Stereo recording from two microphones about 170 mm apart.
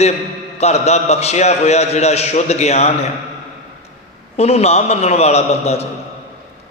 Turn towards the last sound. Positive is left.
turn(degrees=40)  # may be behind; listen again after turning